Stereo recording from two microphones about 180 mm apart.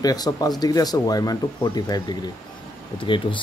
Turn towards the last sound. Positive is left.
turn(degrees=25)  # may be behind; listen again after turning